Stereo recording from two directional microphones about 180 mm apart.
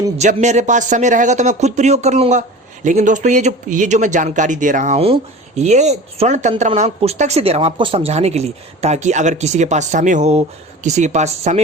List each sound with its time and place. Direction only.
0.2 s speech: 40° right (ahead or behind)